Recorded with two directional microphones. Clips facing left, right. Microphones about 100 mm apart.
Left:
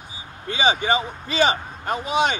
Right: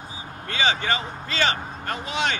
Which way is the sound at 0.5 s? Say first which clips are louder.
Left 4 dB; 15° left (ahead or behind).